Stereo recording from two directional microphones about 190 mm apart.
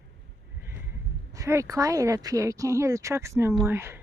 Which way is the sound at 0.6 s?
15° right (ahead or behind).